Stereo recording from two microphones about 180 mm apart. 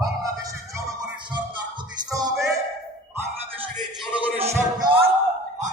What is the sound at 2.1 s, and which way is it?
Music, 20° right (ahead or behind).